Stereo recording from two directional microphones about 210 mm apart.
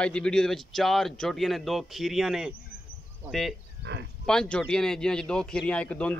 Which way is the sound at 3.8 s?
55° right (ahead or behind).